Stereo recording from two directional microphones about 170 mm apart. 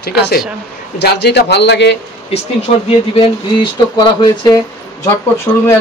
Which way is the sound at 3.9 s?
25° left (ahead or behind).